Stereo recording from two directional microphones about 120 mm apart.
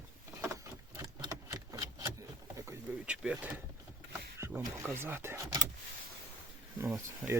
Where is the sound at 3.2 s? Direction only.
5° right (ahead or behind).